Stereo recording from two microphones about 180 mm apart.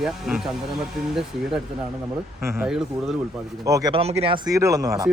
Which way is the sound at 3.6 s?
20° right (ahead or behind).